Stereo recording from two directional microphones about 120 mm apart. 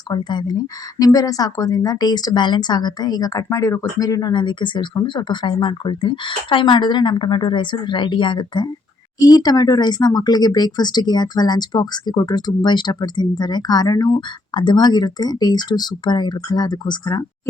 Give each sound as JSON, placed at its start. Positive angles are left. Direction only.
{"t": 0.1, "sound": "speech", "side_deg": 35}